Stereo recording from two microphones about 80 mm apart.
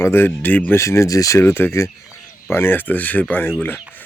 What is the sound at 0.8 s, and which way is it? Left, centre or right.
Speech, left.